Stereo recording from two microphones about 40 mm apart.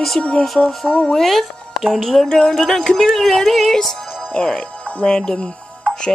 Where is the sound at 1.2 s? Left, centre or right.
Centre.